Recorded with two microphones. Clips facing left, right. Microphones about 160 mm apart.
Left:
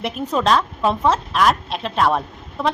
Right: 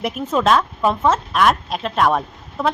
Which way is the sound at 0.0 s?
Centre (ahead or behind).